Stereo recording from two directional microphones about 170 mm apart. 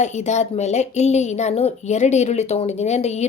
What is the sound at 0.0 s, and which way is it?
A woman's voice, 40° left (ahead or behind).